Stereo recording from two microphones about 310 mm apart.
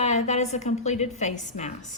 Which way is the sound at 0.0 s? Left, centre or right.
Left.